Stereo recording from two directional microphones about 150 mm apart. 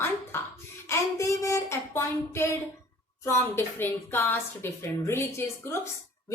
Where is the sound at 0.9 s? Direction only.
20° left (ahead or behind).